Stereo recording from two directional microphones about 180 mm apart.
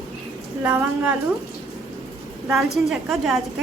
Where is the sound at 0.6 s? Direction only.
10° right (ahead or behind).